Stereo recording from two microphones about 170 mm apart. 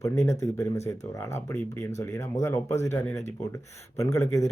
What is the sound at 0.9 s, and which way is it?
Speech, 15° left (ahead or behind).